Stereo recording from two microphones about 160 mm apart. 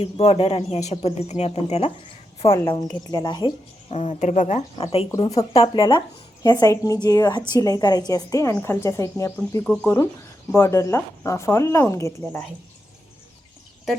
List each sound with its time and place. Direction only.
0.0 s a woman's voice: 35° left (ahead or behind)
3.9 s speech: 40° left (ahead or behind)
5.5 s a woman's voice: 30° left (ahead or behind)